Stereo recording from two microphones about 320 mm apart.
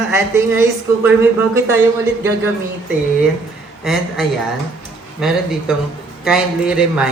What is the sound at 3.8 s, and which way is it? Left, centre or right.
Speech, centre.